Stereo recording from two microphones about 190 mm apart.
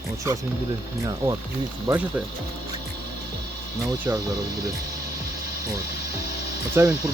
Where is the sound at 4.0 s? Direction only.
20° right (ahead or behind).